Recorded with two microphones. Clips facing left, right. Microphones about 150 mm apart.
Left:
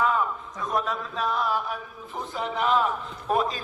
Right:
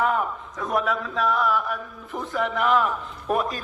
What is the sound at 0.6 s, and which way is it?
A man's voice, 65° right (ahead or behind).